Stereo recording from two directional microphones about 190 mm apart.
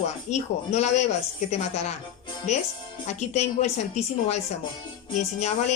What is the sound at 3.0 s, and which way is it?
Speech, 35° left (ahead or behind).